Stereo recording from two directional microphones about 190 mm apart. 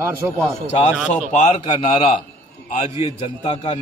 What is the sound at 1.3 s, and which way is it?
A man's voice, 35° left (ahead or behind).